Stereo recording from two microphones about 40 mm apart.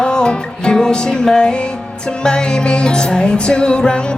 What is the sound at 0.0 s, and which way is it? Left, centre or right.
Music, left.